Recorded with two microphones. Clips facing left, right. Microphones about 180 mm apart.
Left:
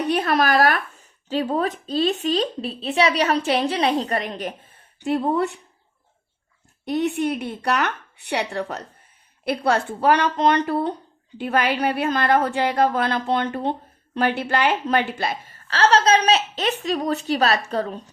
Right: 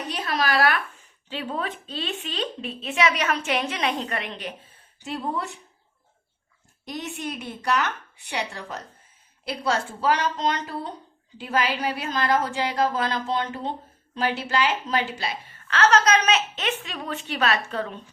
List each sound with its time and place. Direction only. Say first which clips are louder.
0.0 s a woman's voice: left 7 dB; 60° left (ahead or behind); by 4.5 s 45° left (ahead or behind)
4.9 s a woman's voice: left 9 dB; 60° left (ahead or behind)
6.8 s a woman's voice: left 10 dB; 60° left (ahead or behind); by 18.0 s 40° left (ahead or behind)